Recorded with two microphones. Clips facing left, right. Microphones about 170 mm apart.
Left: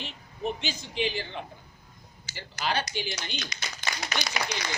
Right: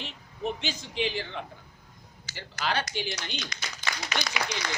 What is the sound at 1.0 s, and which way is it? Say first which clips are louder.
A man's voice: even; 15° left (ahead or behind).